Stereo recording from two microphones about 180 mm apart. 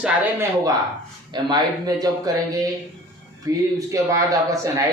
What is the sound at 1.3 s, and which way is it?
Speech, 20° right (ahead or behind).